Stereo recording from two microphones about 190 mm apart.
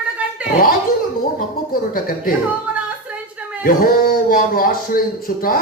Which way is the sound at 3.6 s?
50° left (ahead or behind).